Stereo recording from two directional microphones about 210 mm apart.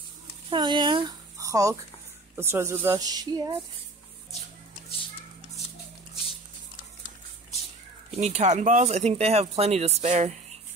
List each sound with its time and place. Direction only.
0.5 s speech: 20° right (ahead or behind)
8.1 s speech: 30° right (ahead or behind)